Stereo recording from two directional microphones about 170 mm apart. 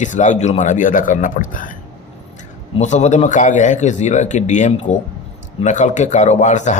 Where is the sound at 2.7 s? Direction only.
40° left (ahead or behind).